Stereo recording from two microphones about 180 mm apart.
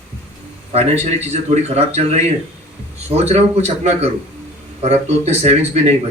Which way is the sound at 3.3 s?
40° right (ahead or behind).